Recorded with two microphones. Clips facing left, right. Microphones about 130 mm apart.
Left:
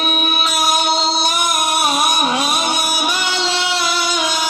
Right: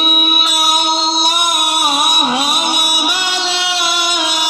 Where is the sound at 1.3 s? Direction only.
25° right (ahead or behind).